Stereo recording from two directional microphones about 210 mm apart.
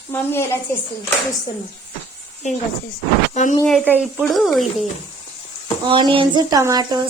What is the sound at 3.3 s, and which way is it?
Speech, 35° left (ahead or behind).